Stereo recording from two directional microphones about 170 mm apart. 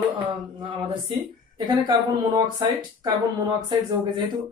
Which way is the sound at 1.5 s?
25° right (ahead or behind).